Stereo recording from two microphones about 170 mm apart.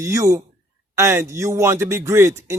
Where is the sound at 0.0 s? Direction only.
20° right (ahead or behind).